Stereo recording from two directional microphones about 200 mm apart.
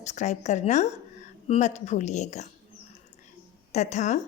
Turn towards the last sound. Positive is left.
turn(degrees=35)  # may be behind; listen again after turning